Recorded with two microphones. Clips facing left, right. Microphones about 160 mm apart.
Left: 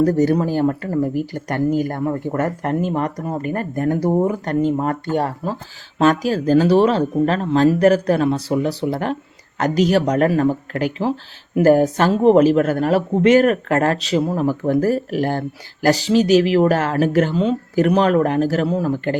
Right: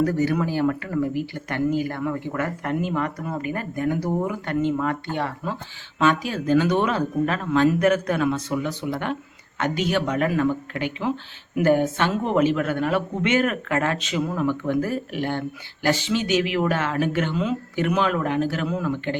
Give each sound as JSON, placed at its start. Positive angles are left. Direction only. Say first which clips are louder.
{"t": 0.0, "sound": "speech", "louder": "left 6 dB", "side_deg": 40}